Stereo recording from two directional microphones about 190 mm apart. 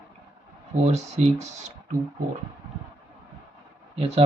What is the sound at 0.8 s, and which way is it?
Speech, 35° right (ahead or behind).